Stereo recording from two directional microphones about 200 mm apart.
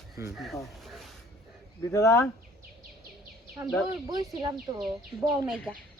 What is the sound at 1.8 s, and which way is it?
Speech, 15° left (ahead or behind).